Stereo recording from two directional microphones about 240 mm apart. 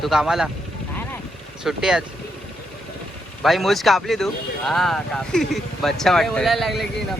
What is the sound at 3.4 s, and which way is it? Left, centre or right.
Speech, centre.